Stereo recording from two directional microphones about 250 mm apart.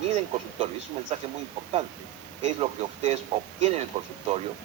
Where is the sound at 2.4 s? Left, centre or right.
Right.